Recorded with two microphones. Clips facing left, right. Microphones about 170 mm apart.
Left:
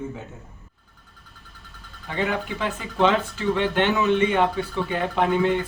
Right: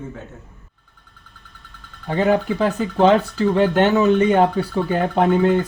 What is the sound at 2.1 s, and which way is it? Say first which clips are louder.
Speech: right 8 dB; 40° right (ahead or behind).